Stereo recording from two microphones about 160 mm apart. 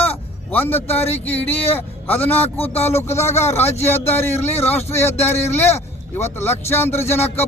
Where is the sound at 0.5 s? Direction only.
10° left (ahead or behind).